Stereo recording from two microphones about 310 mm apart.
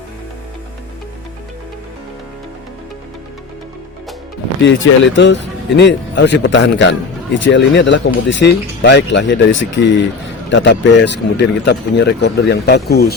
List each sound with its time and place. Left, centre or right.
4.6 s speech: left